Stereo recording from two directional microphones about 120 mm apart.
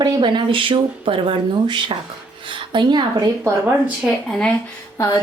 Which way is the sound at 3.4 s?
10° right (ahead or behind).